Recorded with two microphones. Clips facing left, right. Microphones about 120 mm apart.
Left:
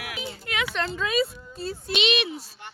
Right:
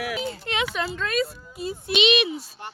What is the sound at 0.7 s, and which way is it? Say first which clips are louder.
Speech: even; 10° right (ahead or behind).